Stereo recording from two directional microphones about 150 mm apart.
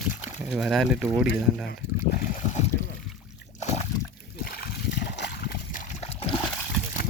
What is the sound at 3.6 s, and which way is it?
Splash, 50° left (ahead or behind).